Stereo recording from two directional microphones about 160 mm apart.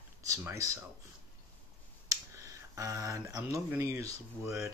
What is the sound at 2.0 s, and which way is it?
Finger snapping, 20° right (ahead or behind).